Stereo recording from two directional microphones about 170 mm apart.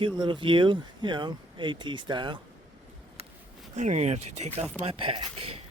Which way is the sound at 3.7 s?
45° right (ahead or behind).